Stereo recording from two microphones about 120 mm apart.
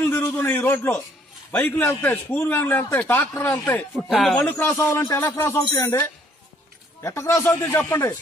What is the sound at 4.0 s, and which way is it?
Speech, centre (ahead or behind).